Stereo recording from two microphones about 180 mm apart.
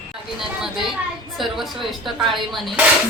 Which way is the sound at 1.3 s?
Centre (ahead or behind).